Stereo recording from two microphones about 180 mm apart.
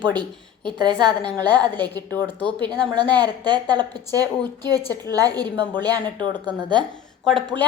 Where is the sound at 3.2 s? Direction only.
25° right (ahead or behind).